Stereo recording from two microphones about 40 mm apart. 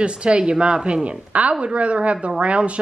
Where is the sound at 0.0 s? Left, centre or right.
Right.